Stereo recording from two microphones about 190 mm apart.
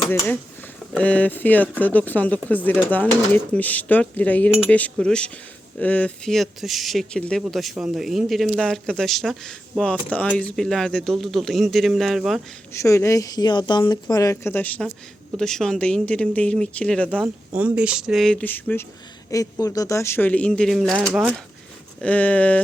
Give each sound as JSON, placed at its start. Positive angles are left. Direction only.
{"t": 0.9, "sound": "a woman's voice", "side_deg": 5}
{"t": 12.8, "sound": "a woman's voice", "side_deg": 15}
{"t": 17.2, "sound": "a woman's voice", "side_deg": -10}